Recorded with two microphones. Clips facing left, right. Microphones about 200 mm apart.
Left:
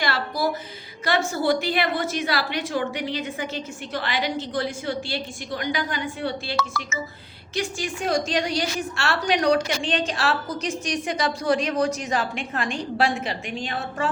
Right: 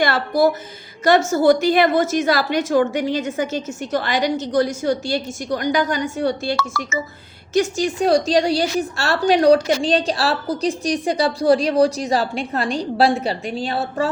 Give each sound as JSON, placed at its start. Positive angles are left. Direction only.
{"t": 0.0, "sound": "a woman's voice", "side_deg": -50}
{"t": 6.6, "sound": "speech", "side_deg": 0}
{"t": 7.5, "sound": "a woman's voice", "side_deg": -40}